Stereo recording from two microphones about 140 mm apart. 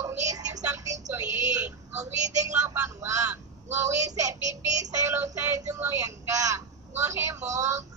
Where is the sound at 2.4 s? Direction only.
15° right (ahead or behind).